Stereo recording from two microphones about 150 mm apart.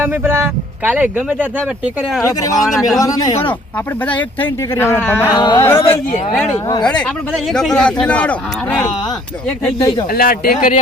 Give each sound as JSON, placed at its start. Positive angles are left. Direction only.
{"t": 0.0, "sound": "speech", "side_deg": -15}
{"t": 3.0, "sound": "speech", "side_deg": 25}
{"t": 4.0, "sound": "speech", "side_deg": 10}
{"t": 5.3, "sound": "speech", "side_deg": 25}
{"t": 5.6, "sound": "speech", "side_deg": 15}
{"t": 10.1, "sound": "a man's voice", "side_deg": 75}